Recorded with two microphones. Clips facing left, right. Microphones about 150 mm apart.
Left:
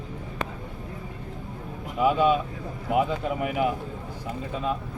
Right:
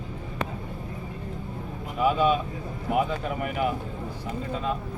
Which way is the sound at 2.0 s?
15° left (ahead or behind).